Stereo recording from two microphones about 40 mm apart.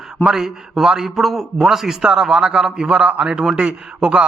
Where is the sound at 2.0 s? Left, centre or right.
Centre.